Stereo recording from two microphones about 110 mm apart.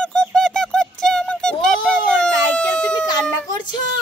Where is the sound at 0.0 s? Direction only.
5° left (ahead or behind).